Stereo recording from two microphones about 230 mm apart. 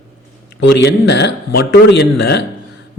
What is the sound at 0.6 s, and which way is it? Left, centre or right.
A man's voice, left.